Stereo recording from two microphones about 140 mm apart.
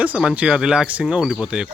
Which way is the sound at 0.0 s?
10° right (ahead or behind).